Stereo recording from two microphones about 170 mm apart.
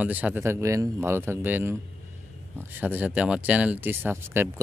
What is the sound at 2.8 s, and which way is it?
Speech, 10° right (ahead or behind).